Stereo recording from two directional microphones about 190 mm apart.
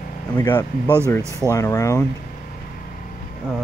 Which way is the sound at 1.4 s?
15° left (ahead or behind).